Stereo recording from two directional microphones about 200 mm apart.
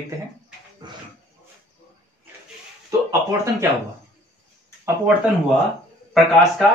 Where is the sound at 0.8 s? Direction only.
20° right (ahead or behind).